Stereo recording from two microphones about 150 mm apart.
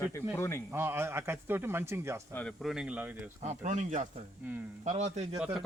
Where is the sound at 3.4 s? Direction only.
50° right (ahead or behind).